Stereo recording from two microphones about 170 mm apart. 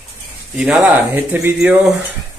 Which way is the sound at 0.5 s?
5° right (ahead or behind).